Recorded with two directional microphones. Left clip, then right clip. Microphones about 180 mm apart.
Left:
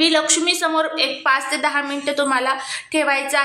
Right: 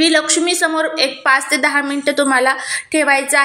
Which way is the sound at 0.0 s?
15° right (ahead or behind).